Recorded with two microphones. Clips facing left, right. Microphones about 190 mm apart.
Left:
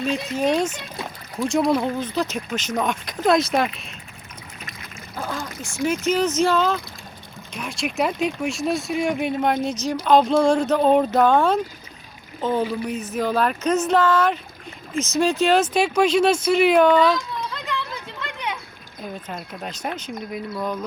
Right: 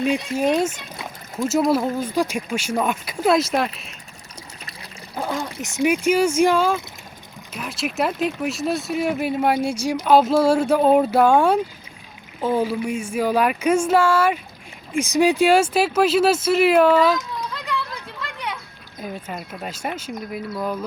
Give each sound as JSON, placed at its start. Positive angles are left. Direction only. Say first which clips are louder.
{"t": 0.0, "sound": "speech", "louder": "right 2 dB", "side_deg": -10}
{"t": 5.6, "sound": "speech", "louder": "right 3 dB", "side_deg": -15}